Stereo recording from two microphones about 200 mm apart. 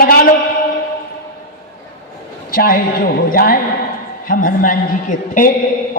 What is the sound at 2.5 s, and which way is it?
A man's voice, 45° left (ahead or behind).